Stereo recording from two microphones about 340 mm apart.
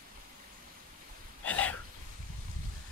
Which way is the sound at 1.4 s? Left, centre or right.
Centre.